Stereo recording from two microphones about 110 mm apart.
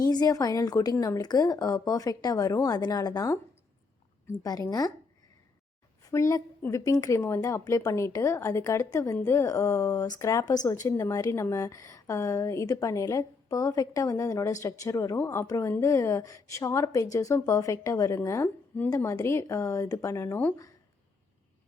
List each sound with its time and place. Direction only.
0.0 s a woman's voice: 35° left (ahead or behind)
4.4 s a woman's voice: 35° left (ahead or behind)
6.0 s a woman's voice: 30° left (ahead or behind)